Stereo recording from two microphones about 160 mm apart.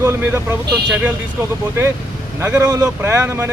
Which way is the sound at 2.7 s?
20° right (ahead or behind).